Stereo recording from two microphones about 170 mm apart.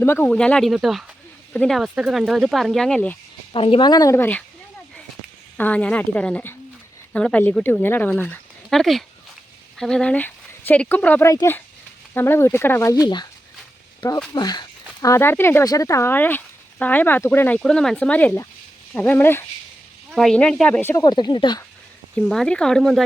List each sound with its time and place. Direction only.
0.0 s speech: 10° left (ahead or behind)
3.5 s speech: 30° left (ahead or behind); by 4.4 s 10° left (ahead or behind)
5.5 s speech: 10° left (ahead or behind)
14.3 s speech: 25° left (ahead or behind)
20.1 s speech: centre (ahead or behind)
21.0 s speech: 25° left (ahead or behind)
22.2 s speech: 5° left (ahead or behind)